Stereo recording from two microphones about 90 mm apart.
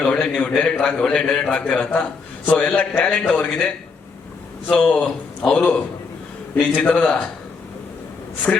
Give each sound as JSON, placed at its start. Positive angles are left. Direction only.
{"t": 0.0, "sound": "a sound", "side_deg": 10}
{"t": 0.5, "sound": "a man's voice", "side_deg": 5}
{"t": 4.8, "sound": "a man's voice", "side_deg": 10}
{"t": 6.7, "sound": "a man's voice", "side_deg": 15}
{"t": 8.5, "sound": "a man's voice", "side_deg": 10}